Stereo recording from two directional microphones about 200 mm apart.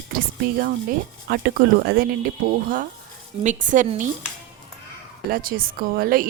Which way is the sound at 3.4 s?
40° right (ahead or behind).